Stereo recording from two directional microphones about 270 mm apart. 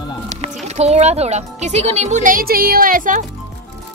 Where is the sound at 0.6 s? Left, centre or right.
Right.